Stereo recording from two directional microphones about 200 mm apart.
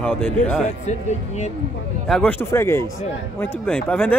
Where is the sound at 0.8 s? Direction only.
35° left (ahead or behind).